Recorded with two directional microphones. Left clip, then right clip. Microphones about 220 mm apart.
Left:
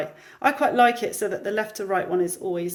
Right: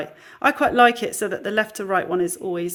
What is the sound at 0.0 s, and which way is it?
Speech, 25° right (ahead or behind).